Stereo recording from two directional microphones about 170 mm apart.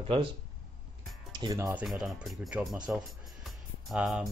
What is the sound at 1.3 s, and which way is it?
Speech, 20° right (ahead or behind).